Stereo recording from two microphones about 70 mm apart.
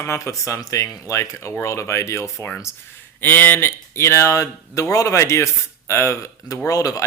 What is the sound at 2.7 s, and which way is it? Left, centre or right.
Speech, left.